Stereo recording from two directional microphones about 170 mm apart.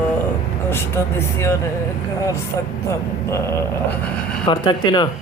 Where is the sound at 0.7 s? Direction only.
15° left (ahead or behind).